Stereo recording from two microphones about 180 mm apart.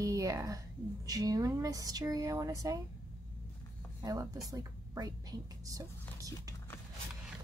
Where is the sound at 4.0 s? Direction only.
20° right (ahead or behind).